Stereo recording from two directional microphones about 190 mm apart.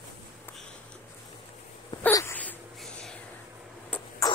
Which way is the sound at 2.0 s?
10° left (ahead or behind).